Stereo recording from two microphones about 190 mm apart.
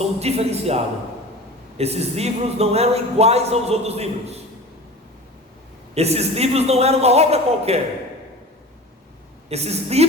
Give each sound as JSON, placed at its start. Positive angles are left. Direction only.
{"t": 0.2, "sound": "speech", "side_deg": -35}
{"t": 1.8, "sound": "speech", "side_deg": -35}
{"t": 5.9, "sound": "speech", "side_deg": -35}
{"t": 9.5, "sound": "speech", "side_deg": -35}